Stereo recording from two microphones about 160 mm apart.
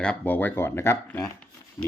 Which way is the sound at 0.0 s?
10° left (ahead or behind).